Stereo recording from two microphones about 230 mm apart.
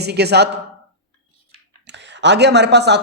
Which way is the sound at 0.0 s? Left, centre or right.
Right.